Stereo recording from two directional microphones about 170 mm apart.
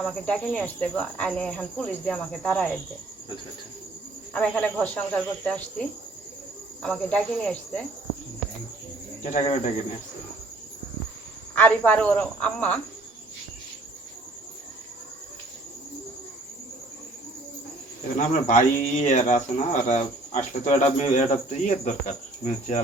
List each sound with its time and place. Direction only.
0.0 s cricket: 5° left (ahead or behind)
4.4 s speech: 10° left (ahead or behind)
6.8 s cricket: 5° left (ahead or behind)
9.2 s speech: 45° left (ahead or behind)
11.5 s speech: 10° left (ahead or behind)
18.4 s speech: 45° left (ahead or behind)